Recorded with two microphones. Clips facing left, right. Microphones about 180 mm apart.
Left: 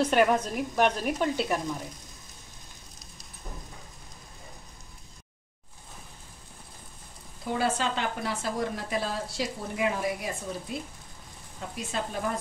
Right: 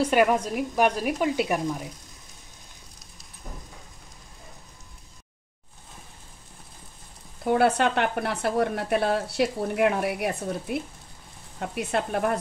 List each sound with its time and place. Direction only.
0.0 s a woman's voice: 5° right (ahead or behind)
7.4 s speech: 60° right (ahead or behind)